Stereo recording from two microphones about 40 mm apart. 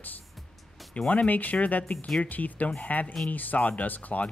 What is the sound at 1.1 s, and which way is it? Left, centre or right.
Speech, left.